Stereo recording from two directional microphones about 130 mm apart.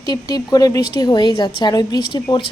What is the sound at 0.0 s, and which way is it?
A woman's voice, 30° left (ahead or behind).